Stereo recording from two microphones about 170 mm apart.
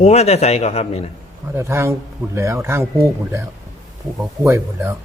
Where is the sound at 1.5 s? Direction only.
15° right (ahead or behind).